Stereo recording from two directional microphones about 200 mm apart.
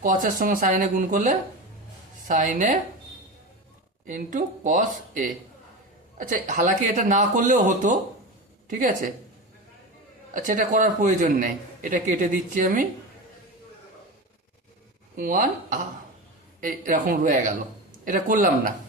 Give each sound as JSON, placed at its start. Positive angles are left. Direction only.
{"t": 0.0, "sound": "a man's voice", "side_deg": -40}
{"t": 4.0, "sound": "a man's voice", "side_deg": -40}
{"t": 10.3, "sound": "a man's voice", "side_deg": -40}
{"t": 15.1, "sound": "speech", "side_deg": -40}